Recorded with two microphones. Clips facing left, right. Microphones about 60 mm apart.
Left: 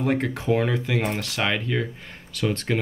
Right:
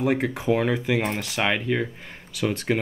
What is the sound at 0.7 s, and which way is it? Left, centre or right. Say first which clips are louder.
Speech: right 1 dB; centre.